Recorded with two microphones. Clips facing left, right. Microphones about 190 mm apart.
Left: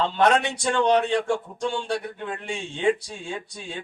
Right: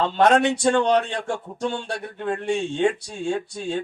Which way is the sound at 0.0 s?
50° right (ahead or behind).